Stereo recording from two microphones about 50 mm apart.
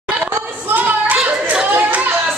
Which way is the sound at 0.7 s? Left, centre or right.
Right.